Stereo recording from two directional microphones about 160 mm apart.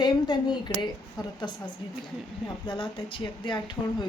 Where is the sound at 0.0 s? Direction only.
30° left (ahead or behind).